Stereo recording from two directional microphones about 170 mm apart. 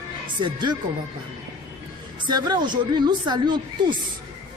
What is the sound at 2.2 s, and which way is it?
Speech, 25° right (ahead or behind).